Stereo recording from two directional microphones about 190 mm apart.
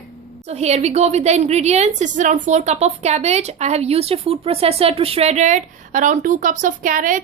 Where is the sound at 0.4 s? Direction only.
35° right (ahead or behind).